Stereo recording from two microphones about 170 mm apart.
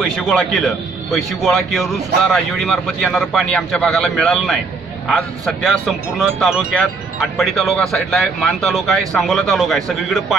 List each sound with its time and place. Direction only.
0.0 s speech: centre (ahead or behind)